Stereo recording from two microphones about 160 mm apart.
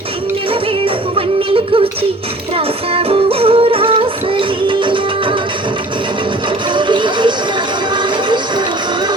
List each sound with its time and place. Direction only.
0.9 s music: 35° right (ahead or behind)
6.7 s music: 30° right (ahead or behind)